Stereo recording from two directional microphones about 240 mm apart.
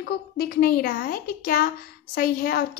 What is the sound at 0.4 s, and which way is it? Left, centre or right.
A woman's voice, left.